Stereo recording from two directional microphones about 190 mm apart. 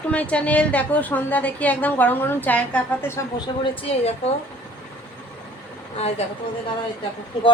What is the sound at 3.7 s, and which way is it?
Speech, 30° left (ahead or behind).